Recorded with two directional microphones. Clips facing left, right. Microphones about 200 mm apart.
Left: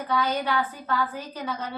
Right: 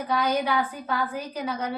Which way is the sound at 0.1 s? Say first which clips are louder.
Right 1 dB; 15° right (ahead or behind).